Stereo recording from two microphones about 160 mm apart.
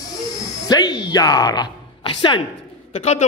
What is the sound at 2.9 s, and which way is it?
Speech, 45° left (ahead or behind).